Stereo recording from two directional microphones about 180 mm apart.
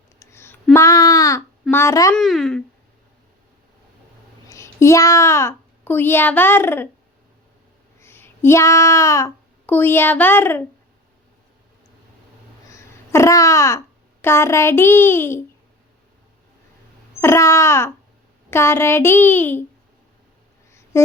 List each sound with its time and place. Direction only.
0.2 s a sound: 15° left (ahead or behind)
1.4 s a child's voice: 10° left (ahead or behind)
2.1 s speech: centre (ahead or behind)
4.4 s a child's voice: 15° left (ahead or behind)
8.0 s child singing: 10° left (ahead or behind)
12.7 s babbling: 15° left (ahead or behind)
17.2 s a child's voice: 15° left (ahead or behind)
20.9 s a sound: 15° left (ahead or behind)